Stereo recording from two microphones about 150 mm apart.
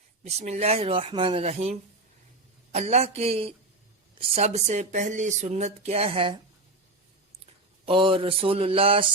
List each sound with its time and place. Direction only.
0.3 s speech: 45° right (ahead or behind)
7.9 s mantra: 35° right (ahead or behind)